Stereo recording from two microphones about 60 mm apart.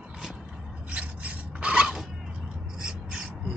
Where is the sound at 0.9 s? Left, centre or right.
Right.